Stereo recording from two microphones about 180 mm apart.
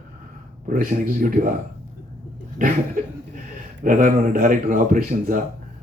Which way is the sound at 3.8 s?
45° right (ahead or behind).